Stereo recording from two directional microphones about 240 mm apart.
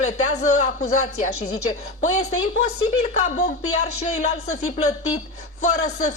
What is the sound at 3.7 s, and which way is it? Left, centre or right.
Speech, left.